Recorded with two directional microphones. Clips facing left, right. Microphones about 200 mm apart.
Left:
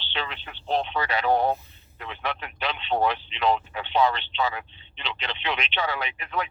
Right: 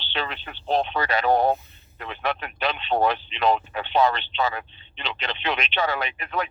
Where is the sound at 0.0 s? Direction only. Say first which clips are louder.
Right 3 dB; 45° right (ahead or behind).